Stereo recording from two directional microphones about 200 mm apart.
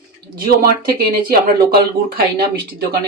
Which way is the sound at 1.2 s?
50° right (ahead or behind).